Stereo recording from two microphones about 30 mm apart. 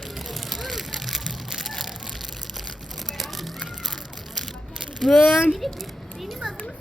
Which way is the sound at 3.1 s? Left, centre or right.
Centre.